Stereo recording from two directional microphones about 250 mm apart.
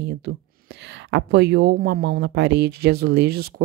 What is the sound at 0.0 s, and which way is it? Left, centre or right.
Speech, right.